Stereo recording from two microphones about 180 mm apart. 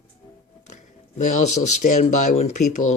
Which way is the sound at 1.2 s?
40° left (ahead or behind).